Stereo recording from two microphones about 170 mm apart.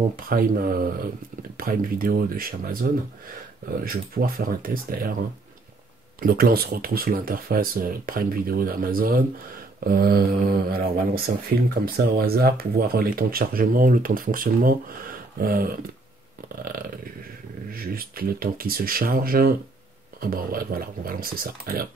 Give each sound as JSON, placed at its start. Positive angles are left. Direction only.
{"t": 0.1, "sound": "speech", "side_deg": -55}
{"t": 6.2, "sound": "speech", "side_deg": -60}
{"t": 17.6, "sound": "speech", "side_deg": -60}